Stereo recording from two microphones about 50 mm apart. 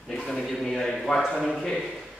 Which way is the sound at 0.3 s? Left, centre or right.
Centre.